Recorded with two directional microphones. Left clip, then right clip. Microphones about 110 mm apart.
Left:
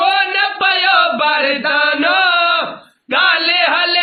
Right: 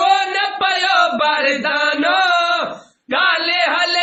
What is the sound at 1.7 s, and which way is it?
Chant, 10° left (ahead or behind).